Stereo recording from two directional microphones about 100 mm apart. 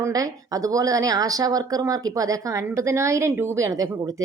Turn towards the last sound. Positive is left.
turn(degrees=-35)  # may be behind; listen again after turning